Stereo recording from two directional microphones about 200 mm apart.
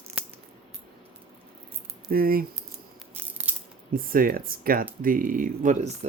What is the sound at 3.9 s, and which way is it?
Speech, 45° right (ahead or behind).